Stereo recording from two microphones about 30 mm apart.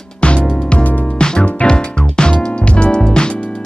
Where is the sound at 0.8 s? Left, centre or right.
Left.